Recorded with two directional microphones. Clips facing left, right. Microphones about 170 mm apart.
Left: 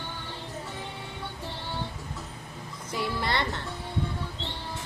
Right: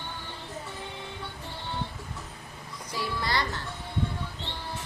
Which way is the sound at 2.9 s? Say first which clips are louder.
Left 2 dB; 20° left (ahead or behind).